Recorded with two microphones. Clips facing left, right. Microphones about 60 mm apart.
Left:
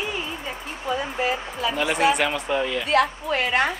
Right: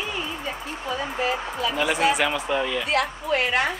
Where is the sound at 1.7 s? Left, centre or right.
Centre.